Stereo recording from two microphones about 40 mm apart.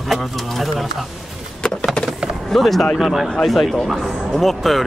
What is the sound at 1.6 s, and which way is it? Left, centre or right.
Vehicle, left.